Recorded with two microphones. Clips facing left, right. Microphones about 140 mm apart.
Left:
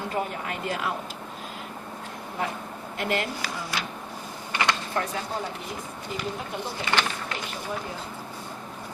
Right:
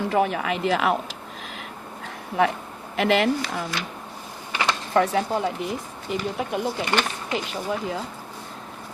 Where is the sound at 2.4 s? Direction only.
80° right.